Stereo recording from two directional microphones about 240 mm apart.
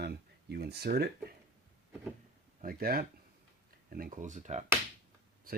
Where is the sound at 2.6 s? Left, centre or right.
Right.